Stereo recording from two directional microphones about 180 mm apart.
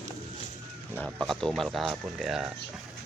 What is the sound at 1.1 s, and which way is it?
Speech, centre (ahead or behind).